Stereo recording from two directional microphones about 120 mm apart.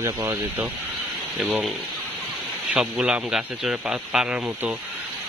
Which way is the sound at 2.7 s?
10° right (ahead or behind).